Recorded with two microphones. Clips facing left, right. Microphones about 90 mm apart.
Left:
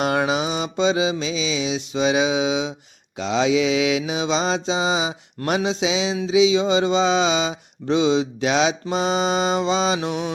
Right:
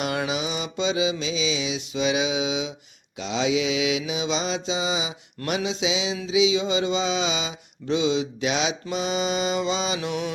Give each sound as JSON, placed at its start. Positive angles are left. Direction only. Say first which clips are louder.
{"t": 0.0, "sound": "mantra", "louder": "left 6 dB", "side_deg": 40}